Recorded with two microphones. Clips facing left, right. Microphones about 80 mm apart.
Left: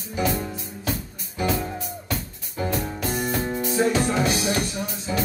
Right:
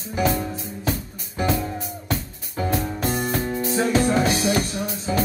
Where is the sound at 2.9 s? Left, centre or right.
Right.